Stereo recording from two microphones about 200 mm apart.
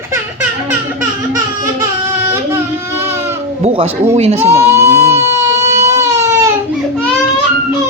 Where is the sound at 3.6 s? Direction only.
30° right (ahead or behind).